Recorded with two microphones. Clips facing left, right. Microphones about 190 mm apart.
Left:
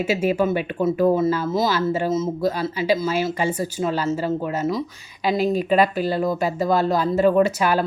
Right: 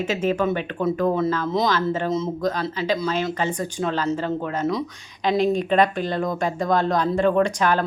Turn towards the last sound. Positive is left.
turn(degrees=5)  # may be behind; listen again after turning